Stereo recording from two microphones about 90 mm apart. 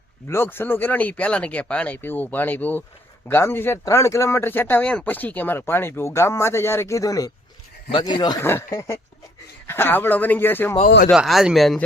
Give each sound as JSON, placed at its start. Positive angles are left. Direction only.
{"t": 0.3, "sound": "speech", "side_deg": 25}
{"t": 7.9, "sound": "speech", "side_deg": 55}
{"t": 8.4, "sound": "speech", "side_deg": 30}
{"t": 11.1, "sound": "speech", "side_deg": -5}